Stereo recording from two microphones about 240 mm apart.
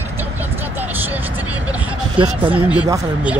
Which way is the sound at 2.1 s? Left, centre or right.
Right.